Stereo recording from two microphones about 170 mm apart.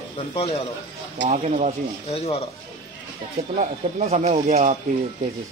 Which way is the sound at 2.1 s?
35° left (ahead or behind).